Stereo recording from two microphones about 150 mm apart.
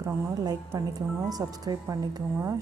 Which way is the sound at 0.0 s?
15° right (ahead or behind).